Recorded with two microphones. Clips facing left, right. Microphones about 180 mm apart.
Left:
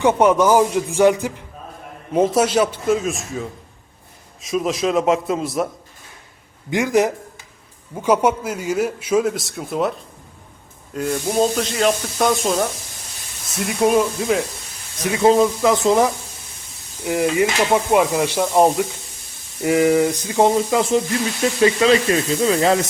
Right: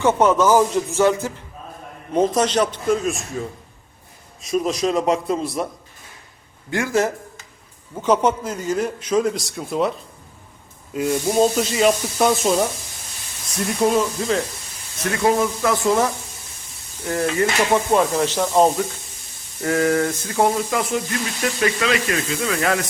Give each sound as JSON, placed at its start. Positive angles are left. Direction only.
{"t": 0.0, "sound": "a man's voice", "side_deg": 15}
{"t": 4.4, "sound": "speech", "side_deg": 0}
{"t": 6.7, "sound": "a man's voice", "side_deg": 15}
{"t": 10.9, "sound": "a sound", "side_deg": -10}
{"t": 11.3, "sound": "speech", "side_deg": 0}
{"t": 13.8, "sound": "a man's voice", "side_deg": 15}
{"t": 15.0, "sound": "a man's voice", "side_deg": 20}